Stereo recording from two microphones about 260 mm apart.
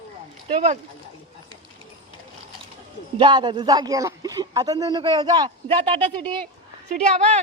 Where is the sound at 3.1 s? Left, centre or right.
Centre.